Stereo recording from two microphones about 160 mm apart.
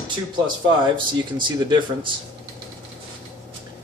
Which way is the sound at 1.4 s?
30° right (ahead or behind).